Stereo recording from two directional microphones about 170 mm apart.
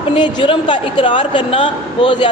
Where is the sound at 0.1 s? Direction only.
30° left (ahead or behind).